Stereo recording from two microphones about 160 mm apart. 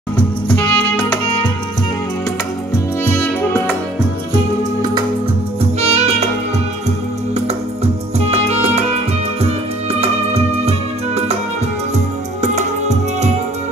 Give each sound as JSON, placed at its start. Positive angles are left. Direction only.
{"t": 0.5, "sound": "music", "side_deg": 5}
{"t": 3.0, "sound": "music", "side_deg": 15}
{"t": 5.8, "sound": "music", "side_deg": -45}
{"t": 8.3, "sound": "music", "side_deg": -40}
{"t": 9.9, "sound": "music", "side_deg": -40}
{"t": 12.4, "sound": "music", "side_deg": -45}